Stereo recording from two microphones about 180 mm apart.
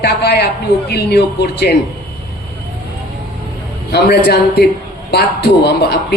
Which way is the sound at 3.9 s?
60° left (ahead or behind).